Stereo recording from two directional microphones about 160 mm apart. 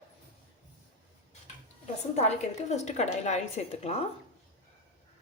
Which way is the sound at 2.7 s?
45° left (ahead or behind).